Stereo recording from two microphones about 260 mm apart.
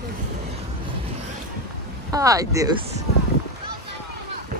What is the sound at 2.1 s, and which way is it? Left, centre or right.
Speech, centre.